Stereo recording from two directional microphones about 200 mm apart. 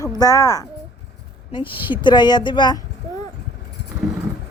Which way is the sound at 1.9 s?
20° left (ahead or behind).